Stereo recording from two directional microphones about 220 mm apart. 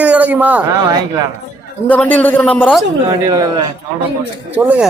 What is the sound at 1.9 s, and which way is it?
Speech, 5° left (ahead or behind).